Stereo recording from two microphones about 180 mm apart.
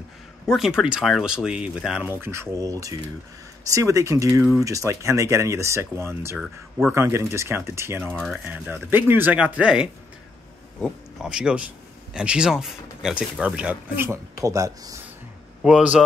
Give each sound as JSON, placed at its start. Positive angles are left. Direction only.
{"t": 0.5, "sound": "speech", "side_deg": 0}
{"t": 2.2, "sound": "speech", "side_deg": -15}
{"t": 8.2, "sound": "speech", "side_deg": 0}
{"t": 15.6, "sound": "speech", "side_deg": -5}